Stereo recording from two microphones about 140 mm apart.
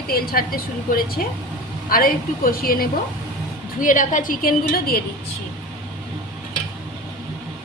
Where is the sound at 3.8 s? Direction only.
70° left (ahead or behind); by 5.0 s 90° left.